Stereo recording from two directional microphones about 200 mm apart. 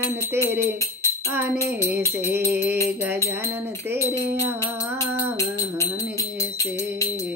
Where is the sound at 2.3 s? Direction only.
10° right (ahead or behind).